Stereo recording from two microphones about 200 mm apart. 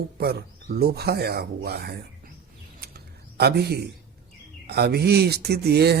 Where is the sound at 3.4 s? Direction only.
55° right (ahead or behind).